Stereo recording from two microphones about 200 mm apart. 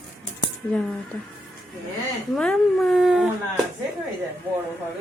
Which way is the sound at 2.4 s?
5° left (ahead or behind).